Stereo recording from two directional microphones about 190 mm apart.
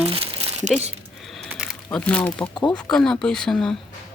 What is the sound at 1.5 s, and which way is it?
Crumpling, 5° right (ahead or behind).